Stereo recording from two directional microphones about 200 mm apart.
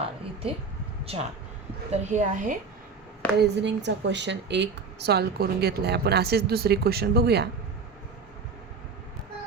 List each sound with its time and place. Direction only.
1.0 s a woman's voice: 30° right (ahead or behind)
3.3 s speech: 55° right (ahead or behind)